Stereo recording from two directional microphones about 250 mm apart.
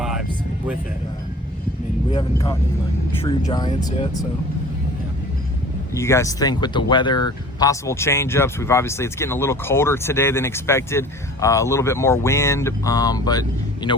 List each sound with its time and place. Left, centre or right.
2.1 s speech: centre
5.9 s speech: centre